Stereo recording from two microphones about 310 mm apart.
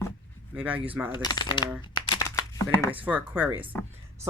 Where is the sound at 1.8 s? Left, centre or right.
Centre.